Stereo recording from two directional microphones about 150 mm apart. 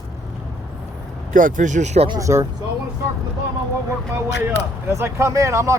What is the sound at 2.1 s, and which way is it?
Speech, 20° right (ahead or behind).